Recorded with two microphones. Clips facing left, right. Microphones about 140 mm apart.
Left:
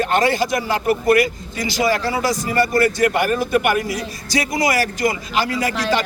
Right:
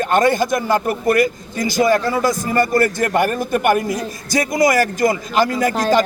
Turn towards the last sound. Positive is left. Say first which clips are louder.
# right 4 dB
turn(degrees=-45)  # may be behind; listen again after turning